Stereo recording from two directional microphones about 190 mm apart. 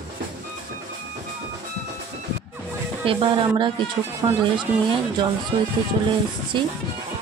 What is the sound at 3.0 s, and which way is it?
Speech, 25° right (ahead or behind).